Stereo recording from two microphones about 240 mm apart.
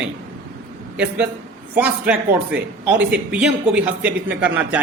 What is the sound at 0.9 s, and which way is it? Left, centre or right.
A man's voice, centre.